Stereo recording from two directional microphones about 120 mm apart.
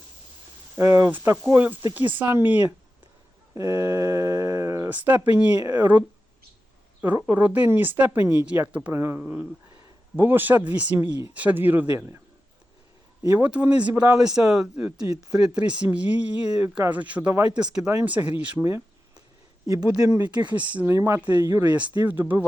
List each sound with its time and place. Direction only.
0.8 s speech: 20° right (ahead or behind)
3.5 s speech: 25° right (ahead or behind)
4.9 s speech: 15° right (ahead or behind)
13.3 s speech: 10° right (ahead or behind)
19.6 s speech: 30° right (ahead or behind)
20.4 s speech: 10° right (ahead or behind)
21.2 s speech: 35° right (ahead or behind)
21.5 s speech: 15° right (ahead or behind)